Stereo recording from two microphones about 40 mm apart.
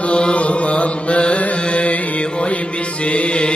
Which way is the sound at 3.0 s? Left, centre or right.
Left.